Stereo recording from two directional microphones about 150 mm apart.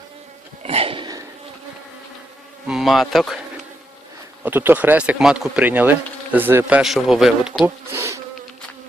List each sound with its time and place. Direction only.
0.6 s a sound: 40° right (ahead or behind)
2.6 s a man's voice: centre (ahead or behind)
4.4 s speech: 10° right (ahead or behind)
7.9 s insect: 20° right (ahead or behind)